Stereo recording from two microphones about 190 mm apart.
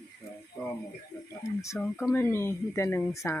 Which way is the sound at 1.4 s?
15° left (ahead or behind).